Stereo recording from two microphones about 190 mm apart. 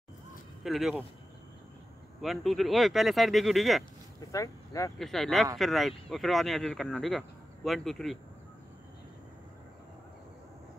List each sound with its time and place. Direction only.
0.7 s speech: centre (ahead or behind)
2.2 s speech: centre (ahead or behind)
4.3 s speech: 15° left (ahead or behind)
4.9 s speech: centre (ahead or behind)